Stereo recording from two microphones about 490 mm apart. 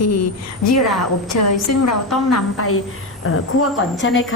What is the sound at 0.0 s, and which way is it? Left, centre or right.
A woman's voice, left.